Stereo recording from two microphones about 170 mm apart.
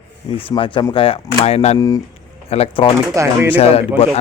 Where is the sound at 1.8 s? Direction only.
20° left (ahead or behind).